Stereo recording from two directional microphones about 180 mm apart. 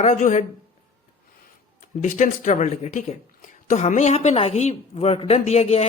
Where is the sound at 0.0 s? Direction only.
40° left (ahead or behind).